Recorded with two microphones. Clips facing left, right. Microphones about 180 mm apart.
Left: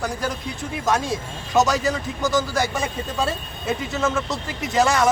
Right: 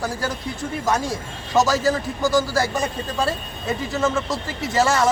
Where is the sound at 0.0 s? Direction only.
Centre (ahead or behind).